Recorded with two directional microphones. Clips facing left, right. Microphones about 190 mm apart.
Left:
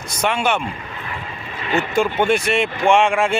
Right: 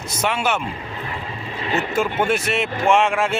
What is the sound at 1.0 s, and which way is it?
Vehicle, 30° right (ahead or behind).